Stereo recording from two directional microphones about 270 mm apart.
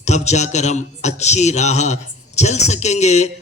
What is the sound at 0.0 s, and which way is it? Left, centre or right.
A man's voice, left.